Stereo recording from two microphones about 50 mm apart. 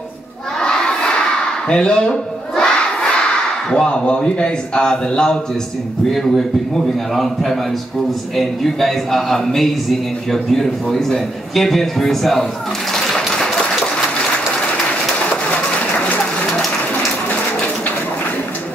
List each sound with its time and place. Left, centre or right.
0.6 s crowd: centre
1.7 s battle cry: centre
3.7 s a man's voice: centre
6.1 s a man's voice: centre
12.9 s a sound: centre